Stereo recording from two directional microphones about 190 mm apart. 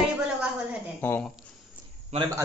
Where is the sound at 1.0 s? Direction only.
10° left (ahead or behind).